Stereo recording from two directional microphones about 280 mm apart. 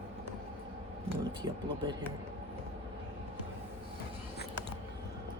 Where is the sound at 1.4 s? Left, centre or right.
Centre.